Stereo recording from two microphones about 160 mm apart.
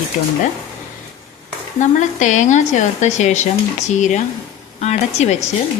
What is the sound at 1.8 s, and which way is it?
Speech, 50° left (ahead or behind).